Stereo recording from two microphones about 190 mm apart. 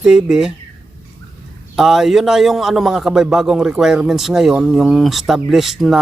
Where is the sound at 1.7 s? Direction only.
Centre (ahead or behind).